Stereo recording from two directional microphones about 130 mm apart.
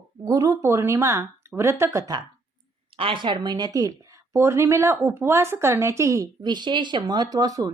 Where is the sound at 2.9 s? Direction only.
45° right (ahead or behind).